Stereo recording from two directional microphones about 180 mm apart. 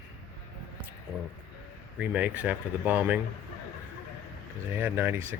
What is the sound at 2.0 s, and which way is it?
Speech, 10° right (ahead or behind).